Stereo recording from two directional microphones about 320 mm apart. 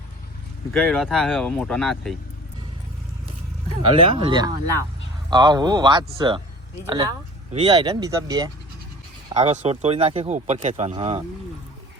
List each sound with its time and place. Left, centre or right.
0.7 s speech: centre
3.8 s speech: centre